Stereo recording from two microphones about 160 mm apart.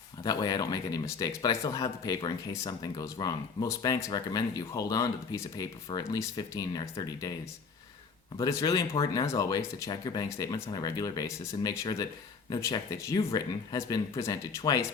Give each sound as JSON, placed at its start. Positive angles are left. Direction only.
{"t": 0.3, "sound": "speech", "side_deg": 25}
{"t": 8.4, "sound": "speech", "side_deg": 20}